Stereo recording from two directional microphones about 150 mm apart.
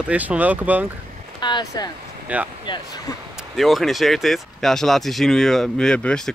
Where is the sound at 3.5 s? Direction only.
Centre (ahead or behind).